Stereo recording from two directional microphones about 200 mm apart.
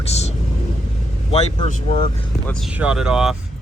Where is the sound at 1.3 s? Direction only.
35° left (ahead or behind).